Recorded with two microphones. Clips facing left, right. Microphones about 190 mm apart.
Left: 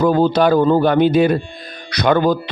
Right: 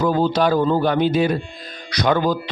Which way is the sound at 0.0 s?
60° left (ahead or behind).